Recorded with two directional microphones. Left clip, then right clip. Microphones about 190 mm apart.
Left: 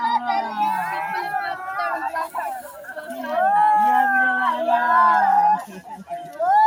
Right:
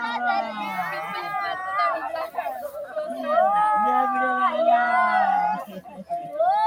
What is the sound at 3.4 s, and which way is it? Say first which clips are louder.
Cat: left 7 dB; 25° right (ahead or behind).